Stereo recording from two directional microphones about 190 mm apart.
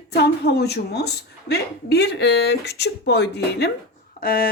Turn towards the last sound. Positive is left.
turn(degrees=50)  # may be behind; listen again after turning